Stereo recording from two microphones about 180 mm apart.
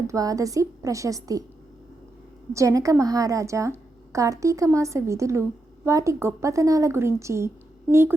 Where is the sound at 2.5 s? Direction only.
15° right (ahead or behind).